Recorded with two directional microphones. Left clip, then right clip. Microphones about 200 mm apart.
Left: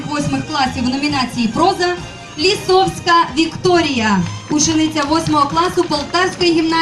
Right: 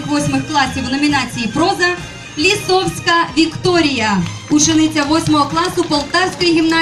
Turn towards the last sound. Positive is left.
turn(degrees=-35)  # may be behind; listen again after turning